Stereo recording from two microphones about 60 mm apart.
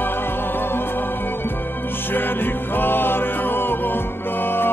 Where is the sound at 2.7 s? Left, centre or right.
Left.